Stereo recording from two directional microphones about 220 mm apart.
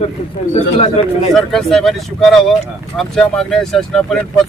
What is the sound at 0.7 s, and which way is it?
Speech, 25° left (ahead or behind).